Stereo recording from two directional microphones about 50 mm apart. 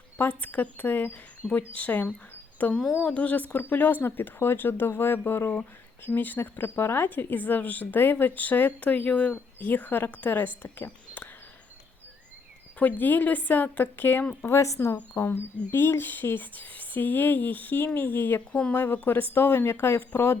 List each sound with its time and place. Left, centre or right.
0.2 s speech: left
6.1 s speech: left
9.6 s speech: left
12.8 s speech: left
14.6 s speech: left
15.1 s speech: left
19.0 s speech: left